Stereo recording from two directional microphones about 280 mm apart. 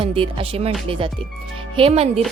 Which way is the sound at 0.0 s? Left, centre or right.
Centre.